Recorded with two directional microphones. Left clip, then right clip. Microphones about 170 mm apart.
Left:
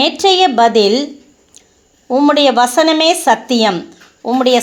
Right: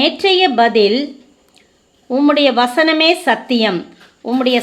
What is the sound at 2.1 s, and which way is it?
Speech, 25° left (ahead or behind).